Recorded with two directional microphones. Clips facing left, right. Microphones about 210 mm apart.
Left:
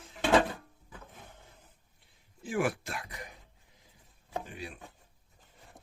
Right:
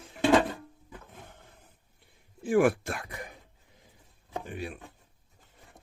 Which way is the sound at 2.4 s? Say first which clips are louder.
Right 8 dB; 55° right (ahead or behind).